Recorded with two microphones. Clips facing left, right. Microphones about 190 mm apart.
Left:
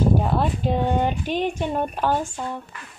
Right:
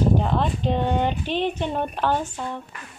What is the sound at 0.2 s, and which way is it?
Speech, 10° left (ahead or behind).